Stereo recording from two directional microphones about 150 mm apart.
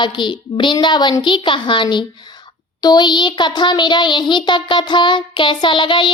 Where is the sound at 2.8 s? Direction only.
25° left (ahead or behind).